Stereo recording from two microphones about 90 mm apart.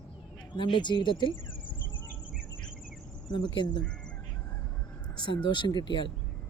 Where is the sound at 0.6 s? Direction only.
60° left (ahead or behind).